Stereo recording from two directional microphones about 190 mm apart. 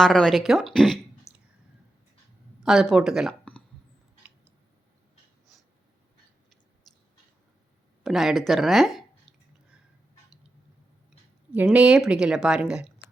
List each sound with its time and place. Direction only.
0.0 s a woman's voice: centre (ahead or behind)
1.3 s a sound: 15° left (ahead or behind)
2.6 s speech: centre (ahead or behind)
8.0 s speech: centre (ahead or behind)
11.5 s a woman's voice: 5° right (ahead or behind)